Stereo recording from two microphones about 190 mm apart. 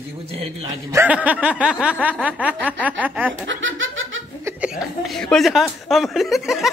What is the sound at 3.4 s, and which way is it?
Speech, 90° right.